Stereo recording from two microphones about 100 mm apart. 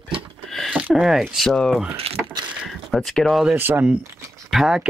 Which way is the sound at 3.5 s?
20° right (ahead or behind).